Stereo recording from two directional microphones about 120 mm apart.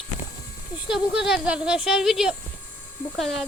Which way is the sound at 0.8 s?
5° right (ahead or behind).